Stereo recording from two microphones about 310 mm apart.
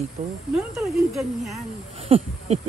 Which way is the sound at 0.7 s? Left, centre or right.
Centre.